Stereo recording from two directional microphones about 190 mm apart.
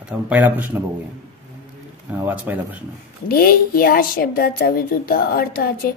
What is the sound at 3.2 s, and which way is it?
A woman's voice, 50° left (ahead or behind).